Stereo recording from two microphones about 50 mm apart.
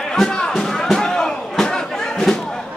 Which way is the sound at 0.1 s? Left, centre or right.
Centre.